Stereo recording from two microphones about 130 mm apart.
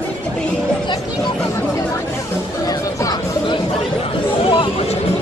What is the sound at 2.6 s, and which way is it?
Chatter, 30° left (ahead or behind).